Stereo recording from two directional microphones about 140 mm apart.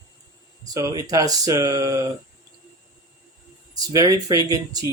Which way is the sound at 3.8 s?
25° right (ahead or behind).